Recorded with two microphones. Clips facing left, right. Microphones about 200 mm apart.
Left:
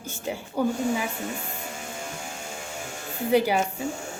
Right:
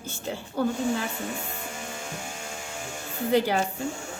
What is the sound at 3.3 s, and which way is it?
Speech, 10° left (ahead or behind).